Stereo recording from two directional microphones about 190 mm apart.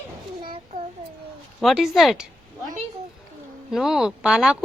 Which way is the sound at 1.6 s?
Centre (ahead or behind).